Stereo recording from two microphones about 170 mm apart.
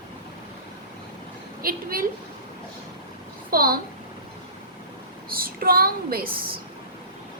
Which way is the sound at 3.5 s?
60° right (ahead or behind).